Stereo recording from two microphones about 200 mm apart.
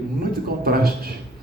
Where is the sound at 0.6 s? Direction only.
50° right (ahead or behind).